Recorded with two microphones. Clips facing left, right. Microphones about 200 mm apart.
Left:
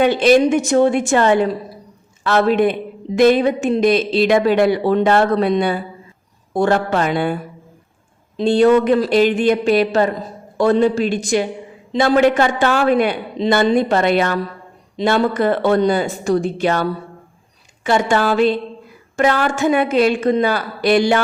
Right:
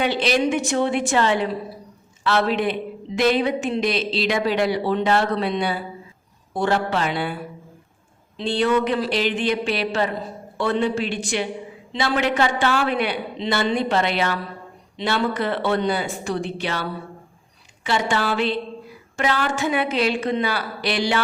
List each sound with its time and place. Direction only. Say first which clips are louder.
0.0 s a woman's voice: left 8 dB; 50° left (ahead or behind)
8.4 s a woman's voice: left 8 dB; 45° left (ahead or behind)